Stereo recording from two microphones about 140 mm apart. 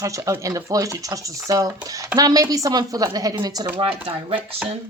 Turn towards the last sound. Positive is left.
turn(degrees=-40)  # may be behind; listen again after turning